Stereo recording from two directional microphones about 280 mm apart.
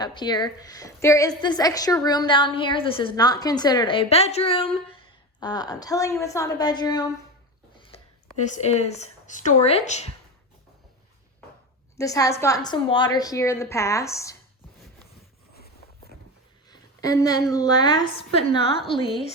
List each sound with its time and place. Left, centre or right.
0.0 s a woman's voice: centre
7.9 s speech: left
11.9 s a woman's voice: centre
15.5 s walk: left
16.6 s a sound: centre
17.5 s a woman's voice: centre